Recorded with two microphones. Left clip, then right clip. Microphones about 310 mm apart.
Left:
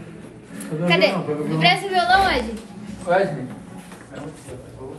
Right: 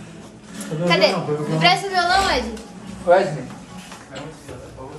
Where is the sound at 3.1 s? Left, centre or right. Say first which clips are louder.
Right 4 dB; right.